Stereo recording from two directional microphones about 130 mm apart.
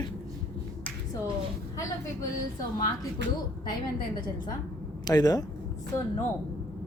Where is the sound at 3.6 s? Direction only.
35° left (ahead or behind).